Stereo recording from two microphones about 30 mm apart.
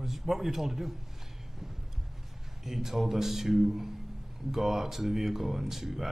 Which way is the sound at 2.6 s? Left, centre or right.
Centre.